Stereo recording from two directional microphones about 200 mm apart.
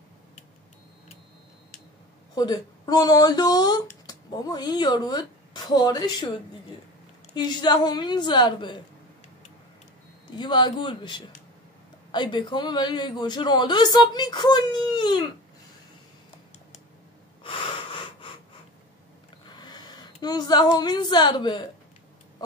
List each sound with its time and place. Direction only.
2.3 s a man's voice: 20° left (ahead or behind)
7.3 s a man's voice: 20° left (ahead or behind)
10.3 s a man's voice: 20° left (ahead or behind)
17.4 s wheeze: 25° left (ahead or behind)
19.4 s a woman's voice: 20° left (ahead or behind)